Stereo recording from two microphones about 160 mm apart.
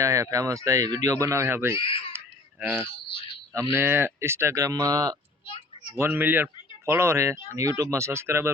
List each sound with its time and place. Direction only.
0.0 s speech: 20° right (ahead or behind)
1.7 s speech: 35° left (ahead or behind)
2.1 s baby cry: 15° right (ahead or behind)
3.1 s a sound: 35° left (ahead or behind)
3.5 s speech: 15° right (ahead or behind)
5.9 s speech: 15° right (ahead or behind)